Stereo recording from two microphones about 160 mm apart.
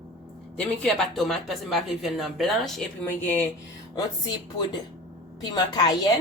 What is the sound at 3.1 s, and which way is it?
Speech, 10° left (ahead or behind).